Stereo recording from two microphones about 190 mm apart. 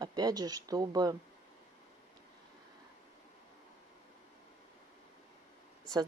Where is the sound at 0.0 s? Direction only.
20° right (ahead or behind).